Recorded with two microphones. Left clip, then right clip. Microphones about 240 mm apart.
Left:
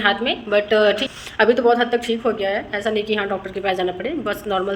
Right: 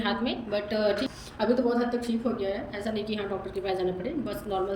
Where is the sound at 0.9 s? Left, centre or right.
Left.